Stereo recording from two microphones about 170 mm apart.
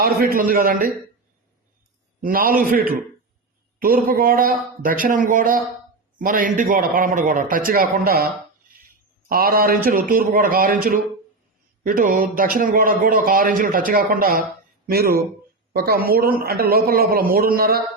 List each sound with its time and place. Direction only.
0.0 s a man's voice: 60° right (ahead or behind)
2.2 s a man's voice: 60° right (ahead or behind)
9.3 s a man's voice: 60° right (ahead or behind)